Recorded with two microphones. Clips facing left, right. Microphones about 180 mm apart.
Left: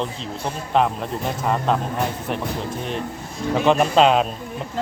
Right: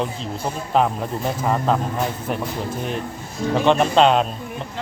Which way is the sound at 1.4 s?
Centre (ahead or behind).